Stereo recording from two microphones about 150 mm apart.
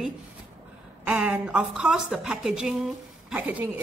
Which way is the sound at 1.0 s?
10° right (ahead or behind).